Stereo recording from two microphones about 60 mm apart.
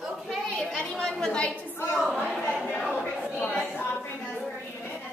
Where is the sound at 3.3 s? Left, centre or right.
Left.